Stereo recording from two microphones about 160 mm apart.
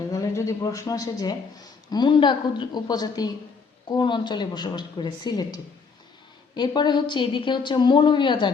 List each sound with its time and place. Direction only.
0.1 s a woman's voice: 20° left (ahead or behind)